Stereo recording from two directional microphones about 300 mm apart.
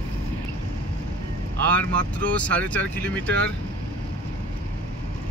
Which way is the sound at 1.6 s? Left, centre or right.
Centre.